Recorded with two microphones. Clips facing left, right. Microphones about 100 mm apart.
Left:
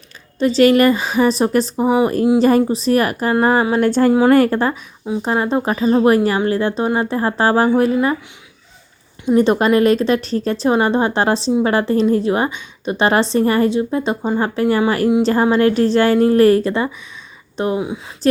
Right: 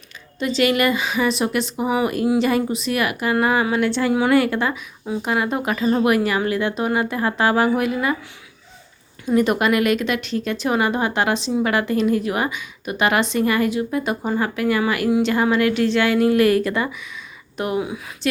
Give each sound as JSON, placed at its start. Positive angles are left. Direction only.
{"t": 0.3, "sound": "a woman's voice", "side_deg": 35}
{"t": 9.2, "sound": "a woman's voice", "side_deg": 30}
{"t": 18.2, "sound": "a woman's voice", "side_deg": 35}